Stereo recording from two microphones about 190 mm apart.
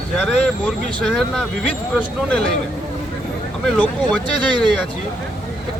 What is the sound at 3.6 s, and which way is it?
Speech, 5° left (ahead or behind).